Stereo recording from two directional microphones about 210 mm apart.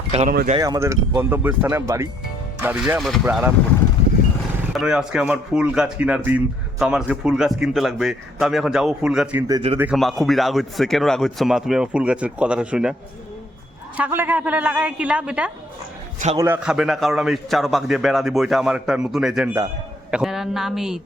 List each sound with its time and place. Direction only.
0.1 s speech: 30° right (ahead or behind)
0.5 s a woman's voice: 15° right (ahead or behind)
4.7 s speech: centre (ahead or behind)
9.5 s speech: 25° right (ahead or behind)
9.7 s a woman's voice: 5° right (ahead or behind)